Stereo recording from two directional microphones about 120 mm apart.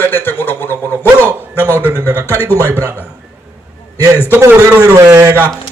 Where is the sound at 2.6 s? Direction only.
25° right (ahead or behind).